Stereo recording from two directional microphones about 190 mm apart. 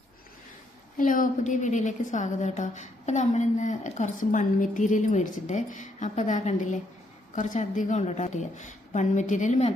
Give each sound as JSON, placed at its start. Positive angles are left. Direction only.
{"t": 0.9, "sound": "a woman's voice", "side_deg": 45}